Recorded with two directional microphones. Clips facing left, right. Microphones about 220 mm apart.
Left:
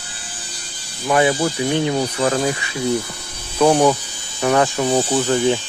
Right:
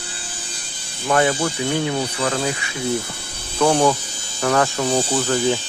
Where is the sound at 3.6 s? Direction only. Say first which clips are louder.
Left 3 dB; 15° left (ahead or behind).